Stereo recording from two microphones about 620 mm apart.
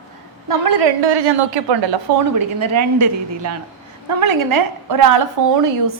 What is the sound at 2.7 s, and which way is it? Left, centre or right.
A woman's voice, right.